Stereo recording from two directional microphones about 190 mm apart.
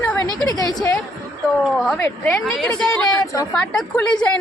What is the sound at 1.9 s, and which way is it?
A woman's voice, 10° left (ahead or behind).